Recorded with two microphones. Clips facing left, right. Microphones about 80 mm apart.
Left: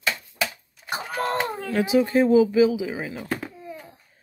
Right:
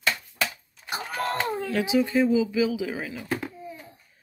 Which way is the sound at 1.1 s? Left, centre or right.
Left.